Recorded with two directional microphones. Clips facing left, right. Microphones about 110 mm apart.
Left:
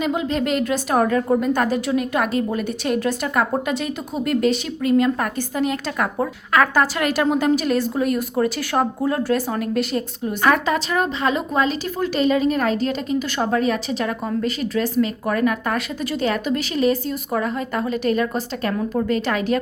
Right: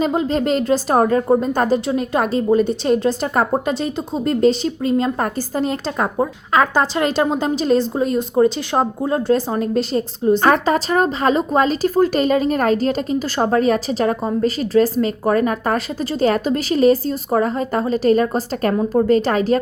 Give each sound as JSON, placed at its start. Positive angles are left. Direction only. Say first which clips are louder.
{"t": 0.0, "sound": "a woman's voice", "louder": "right 3 dB", "side_deg": -35}
{"t": 6.1, "sound": "a woman's voice", "louder": "right 2 dB", "side_deg": -25}